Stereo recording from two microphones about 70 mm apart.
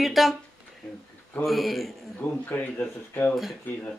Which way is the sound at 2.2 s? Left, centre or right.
Left.